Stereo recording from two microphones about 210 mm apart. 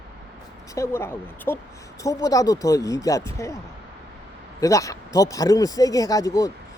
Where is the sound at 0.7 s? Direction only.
15° left (ahead or behind).